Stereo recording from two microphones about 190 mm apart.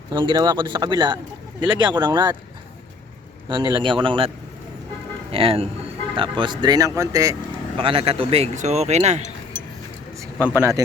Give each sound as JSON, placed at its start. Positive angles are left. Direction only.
{"t": 0.1, "sound": "speech", "side_deg": -25}
{"t": 3.5, "sound": "speech", "side_deg": -25}
{"t": 5.3, "sound": "speech", "side_deg": -30}
{"t": 7.8, "sound": "speech", "side_deg": -30}
{"t": 10.4, "sound": "speech", "side_deg": -15}